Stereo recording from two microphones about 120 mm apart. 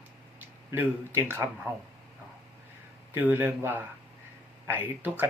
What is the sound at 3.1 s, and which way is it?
Speech, 15° right (ahead or behind).